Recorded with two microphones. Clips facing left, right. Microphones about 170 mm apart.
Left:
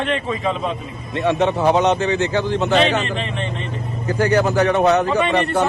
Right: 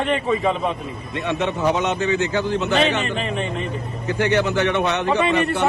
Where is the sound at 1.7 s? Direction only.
40° left (ahead or behind).